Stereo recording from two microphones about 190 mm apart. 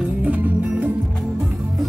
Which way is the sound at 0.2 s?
10° right (ahead or behind).